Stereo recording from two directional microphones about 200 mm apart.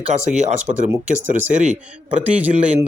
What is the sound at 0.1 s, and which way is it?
Speech, 35° right (ahead or behind).